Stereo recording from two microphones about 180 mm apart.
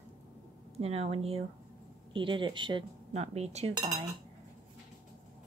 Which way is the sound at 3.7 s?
20° right (ahead or behind).